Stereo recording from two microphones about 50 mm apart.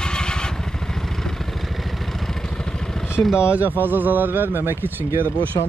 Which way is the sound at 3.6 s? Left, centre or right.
Right.